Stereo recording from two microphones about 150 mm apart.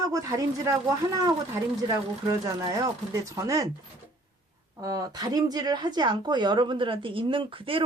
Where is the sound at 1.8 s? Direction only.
20° right (ahead or behind).